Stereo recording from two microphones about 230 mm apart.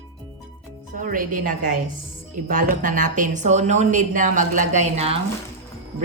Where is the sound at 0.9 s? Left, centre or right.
Right.